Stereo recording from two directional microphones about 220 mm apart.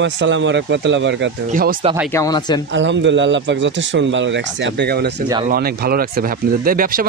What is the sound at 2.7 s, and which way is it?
Speech, 55° right (ahead or behind).